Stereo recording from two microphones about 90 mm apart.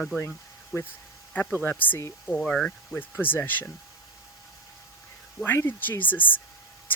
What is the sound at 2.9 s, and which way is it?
Speech, 20° left (ahead or behind).